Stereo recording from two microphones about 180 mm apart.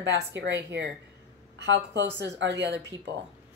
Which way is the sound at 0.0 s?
75° right (ahead or behind).